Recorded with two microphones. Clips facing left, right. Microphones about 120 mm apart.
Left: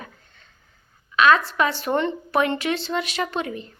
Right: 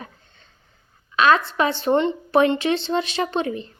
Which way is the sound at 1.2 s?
30° right (ahead or behind).